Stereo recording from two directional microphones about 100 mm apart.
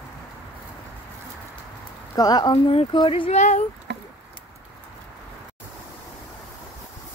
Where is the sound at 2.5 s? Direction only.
70° left (ahead or behind).